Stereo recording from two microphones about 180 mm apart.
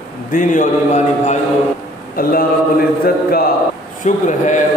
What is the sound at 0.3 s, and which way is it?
A man's voice, 45° left (ahead or behind).